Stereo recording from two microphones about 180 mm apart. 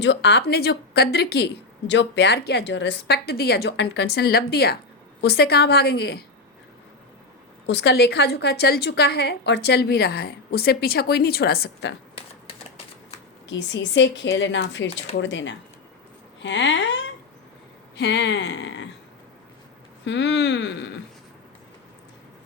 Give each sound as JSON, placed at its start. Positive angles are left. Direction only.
{"t": 0.0, "sound": "a woman's voice", "side_deg": 75}
{"t": 1.9, "sound": "a woman's voice", "side_deg": 80}
{"t": 7.7, "sound": "a woman's voice", "side_deg": 70}
{"t": 13.5, "sound": "a woman's voice", "side_deg": 80}
{"t": 17.9, "sound": "a woman's voice", "side_deg": 75}
{"t": 20.1, "sound": "a woman's voice", "side_deg": 80}